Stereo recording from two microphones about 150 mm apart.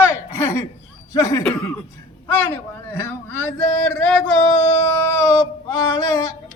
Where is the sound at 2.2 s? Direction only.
15° left (ahead or behind).